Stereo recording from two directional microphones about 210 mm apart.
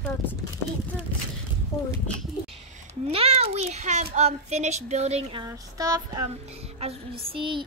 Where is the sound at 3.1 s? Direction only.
30° right (ahead or behind).